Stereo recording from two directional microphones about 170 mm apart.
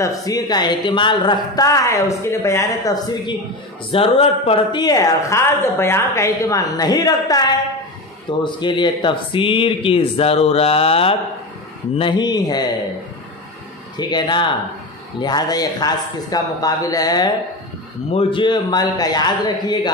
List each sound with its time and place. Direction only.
0.0 s speech: 20° left (ahead or behind)
3.9 s speech: 35° left (ahead or behind)
13.9 s speech: 25° left (ahead or behind)